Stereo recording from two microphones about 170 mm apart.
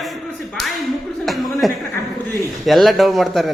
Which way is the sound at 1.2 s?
Centre (ahead or behind).